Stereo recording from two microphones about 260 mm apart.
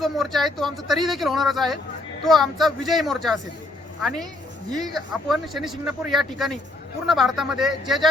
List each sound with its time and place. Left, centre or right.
0.0 s speech: centre
4.7 s speech: centre
5.3 s speech: centre